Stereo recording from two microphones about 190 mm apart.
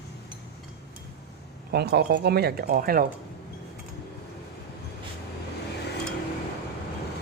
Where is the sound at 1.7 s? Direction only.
60° right (ahead or behind).